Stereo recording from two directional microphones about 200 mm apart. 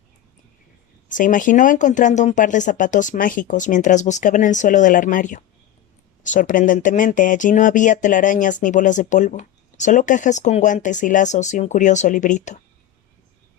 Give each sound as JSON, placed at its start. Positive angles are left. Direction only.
{"t": 1.0, "sound": "speech", "side_deg": 40}